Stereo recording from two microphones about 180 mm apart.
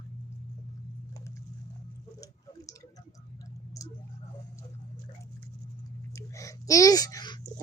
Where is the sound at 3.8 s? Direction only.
20° left (ahead or behind).